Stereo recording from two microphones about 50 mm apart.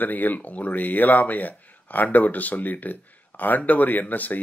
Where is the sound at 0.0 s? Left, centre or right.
Left.